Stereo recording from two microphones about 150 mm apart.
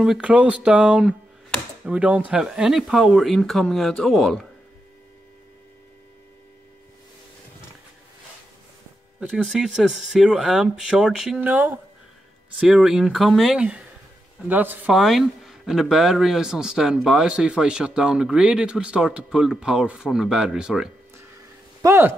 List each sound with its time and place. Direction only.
0.0 s speech: 5° right (ahead or behind)
9.3 s speech: centre (ahead or behind)
21.8 s speech: 15° right (ahead or behind)